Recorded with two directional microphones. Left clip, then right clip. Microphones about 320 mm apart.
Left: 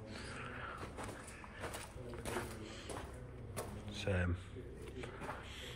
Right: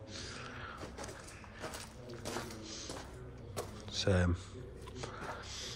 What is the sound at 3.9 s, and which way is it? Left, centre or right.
Speech, right.